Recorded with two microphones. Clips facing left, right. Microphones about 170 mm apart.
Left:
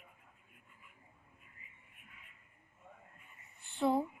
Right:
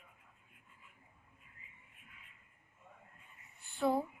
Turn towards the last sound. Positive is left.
turn(degrees=25)  # may be behind; listen again after turning